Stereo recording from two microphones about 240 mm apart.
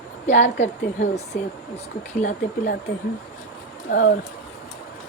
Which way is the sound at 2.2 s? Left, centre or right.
Left.